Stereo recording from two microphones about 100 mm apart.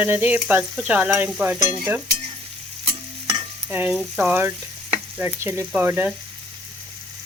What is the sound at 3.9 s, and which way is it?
Frying, centre (ahead or behind).